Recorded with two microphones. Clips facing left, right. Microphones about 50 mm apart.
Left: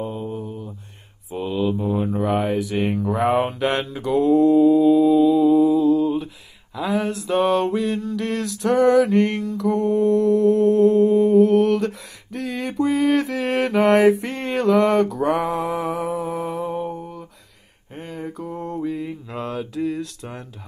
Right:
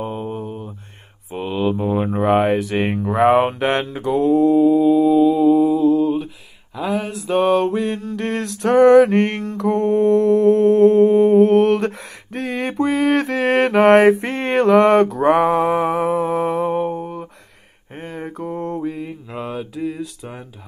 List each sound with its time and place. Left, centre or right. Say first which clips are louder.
0.0 s mantra: right 2 dB; right
1.3 s speech: right 2 dB; right
4.0 s mantra: even; right
7.8 s a sound: right 1 dB; right
12.4 s mantra: right 3 dB; right
18.8 s mantra: even; right
19.3 s mantra: even; centre